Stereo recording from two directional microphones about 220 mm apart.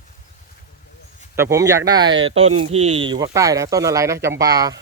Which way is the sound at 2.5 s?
80° right.